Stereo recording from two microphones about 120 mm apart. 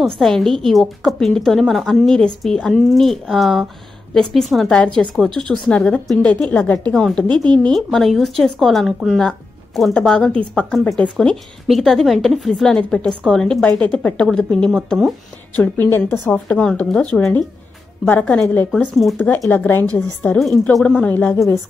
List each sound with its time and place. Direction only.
0.0 s a woman's voice: centre (ahead or behind)
15.5 s speech: 15° left (ahead or behind)
18.7 s a woman's voice: centre (ahead or behind)
19.1 s speech: 15° left (ahead or behind)